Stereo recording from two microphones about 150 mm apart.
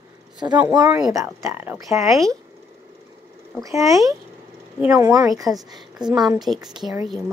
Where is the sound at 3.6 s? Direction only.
20° right (ahead or behind).